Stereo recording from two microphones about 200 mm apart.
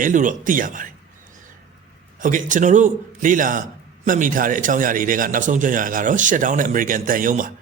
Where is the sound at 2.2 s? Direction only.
40° right (ahead or behind).